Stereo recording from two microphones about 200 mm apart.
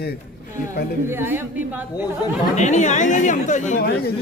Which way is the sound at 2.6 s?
35° left (ahead or behind).